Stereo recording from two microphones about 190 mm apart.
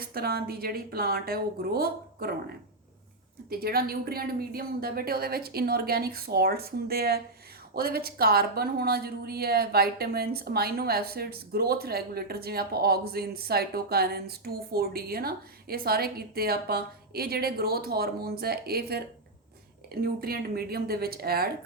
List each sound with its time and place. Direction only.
0.0 s a woman's voice: 55° right (ahead or behind)
3.5 s a woman's voice: 55° right (ahead or behind)